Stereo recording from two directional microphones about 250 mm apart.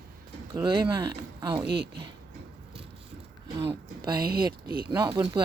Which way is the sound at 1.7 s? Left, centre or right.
Right.